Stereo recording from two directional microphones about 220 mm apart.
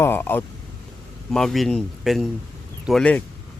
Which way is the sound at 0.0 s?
10° left (ahead or behind).